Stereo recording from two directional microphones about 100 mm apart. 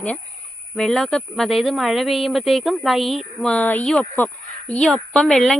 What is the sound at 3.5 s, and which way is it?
Speech, 15° left (ahead or behind).